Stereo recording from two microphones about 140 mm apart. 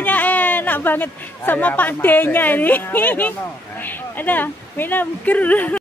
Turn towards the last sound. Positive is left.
turn(degrees=10)  # may be behind; listen again after turning